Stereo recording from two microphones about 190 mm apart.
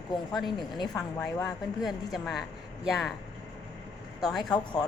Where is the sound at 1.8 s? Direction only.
Centre (ahead or behind).